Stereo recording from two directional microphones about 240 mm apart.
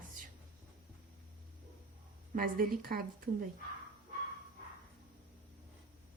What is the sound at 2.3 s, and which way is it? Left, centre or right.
Speech, right.